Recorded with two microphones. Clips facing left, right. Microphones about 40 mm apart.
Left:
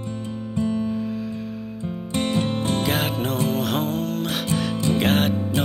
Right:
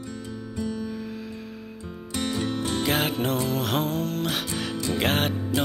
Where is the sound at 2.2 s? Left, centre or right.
Left.